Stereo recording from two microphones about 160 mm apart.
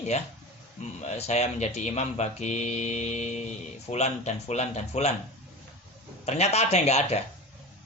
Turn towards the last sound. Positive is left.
turn(degrees=45)  # may be behind; listen again after turning